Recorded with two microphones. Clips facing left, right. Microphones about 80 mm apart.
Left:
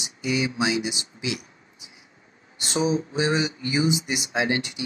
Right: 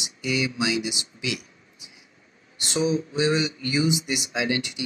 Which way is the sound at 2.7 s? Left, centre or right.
Left.